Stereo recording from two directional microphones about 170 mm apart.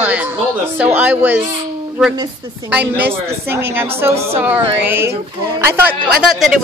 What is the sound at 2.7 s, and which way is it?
A woman's voice, 10° right (ahead or behind).